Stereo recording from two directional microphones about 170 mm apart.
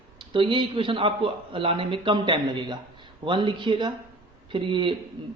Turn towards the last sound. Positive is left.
turn(degrees=-25)  # may be behind; listen again after turning